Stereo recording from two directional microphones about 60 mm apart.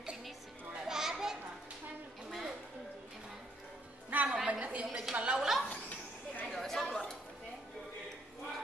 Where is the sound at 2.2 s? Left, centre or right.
Centre.